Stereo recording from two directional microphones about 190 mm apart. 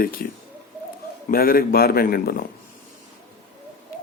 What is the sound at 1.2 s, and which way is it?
Speech, 50° left (ahead or behind).